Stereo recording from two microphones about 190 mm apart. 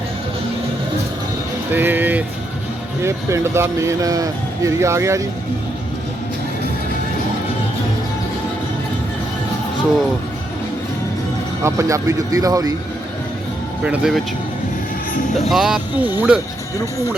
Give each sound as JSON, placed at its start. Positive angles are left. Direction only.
{"t": 1.7, "sound": "music", "side_deg": -10}
{"t": 3.0, "sound": "speech", "side_deg": -15}
{"t": 11.6, "sound": "speech", "side_deg": -15}
{"t": 13.8, "sound": "speech", "side_deg": -5}
{"t": 15.4, "sound": "speech", "side_deg": 0}